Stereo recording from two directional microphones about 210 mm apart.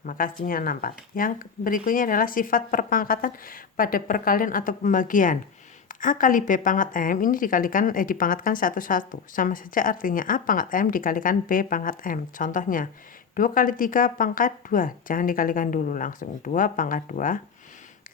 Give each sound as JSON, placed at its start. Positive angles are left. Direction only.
{"t": 0.0, "sound": "a woman's voice", "side_deg": 40}